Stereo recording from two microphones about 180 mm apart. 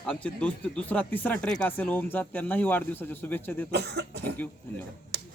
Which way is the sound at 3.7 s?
65° right (ahead or behind).